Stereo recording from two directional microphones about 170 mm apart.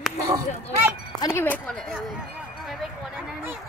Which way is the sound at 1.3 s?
10° left (ahead or behind).